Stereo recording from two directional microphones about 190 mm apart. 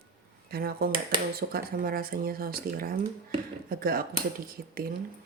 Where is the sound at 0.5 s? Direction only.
55° right (ahead or behind).